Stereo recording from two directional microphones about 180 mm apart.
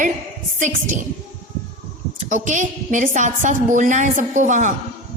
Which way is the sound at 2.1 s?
45° right (ahead or behind).